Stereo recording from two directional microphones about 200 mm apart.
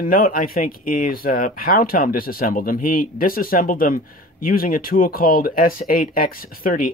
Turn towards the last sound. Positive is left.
turn(degrees=45)  # may be behind; listen again after turning